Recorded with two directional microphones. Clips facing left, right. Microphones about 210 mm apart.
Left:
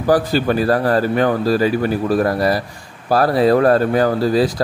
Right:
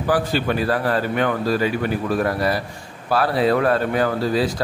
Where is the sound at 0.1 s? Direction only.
40° left (ahead or behind).